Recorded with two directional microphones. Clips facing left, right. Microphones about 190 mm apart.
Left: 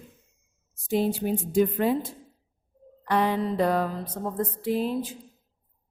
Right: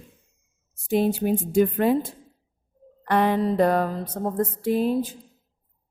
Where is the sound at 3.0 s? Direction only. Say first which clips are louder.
Right 3 dB; 55° right (ahead or behind).